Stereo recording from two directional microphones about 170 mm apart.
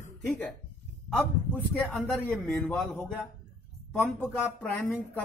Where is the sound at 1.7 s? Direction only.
5° left (ahead or behind).